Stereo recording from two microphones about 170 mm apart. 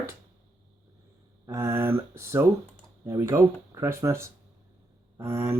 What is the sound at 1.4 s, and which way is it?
Speech, 15° right (ahead or behind).